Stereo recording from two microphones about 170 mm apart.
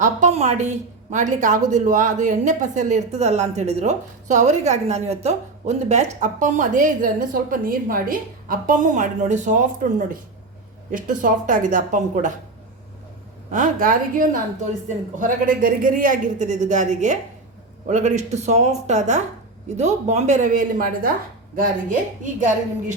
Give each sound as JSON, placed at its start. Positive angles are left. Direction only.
{"t": 0.0, "sound": "a woman's voice", "side_deg": -45}
{"t": 10.9, "sound": "a woman's voice", "side_deg": -50}
{"t": 13.5, "sound": "a woman's voice", "side_deg": -50}